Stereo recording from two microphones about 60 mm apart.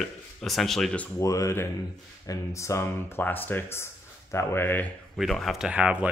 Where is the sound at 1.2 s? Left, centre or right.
Left.